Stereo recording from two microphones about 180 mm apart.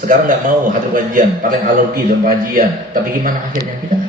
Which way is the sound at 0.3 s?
50° right (ahead or behind).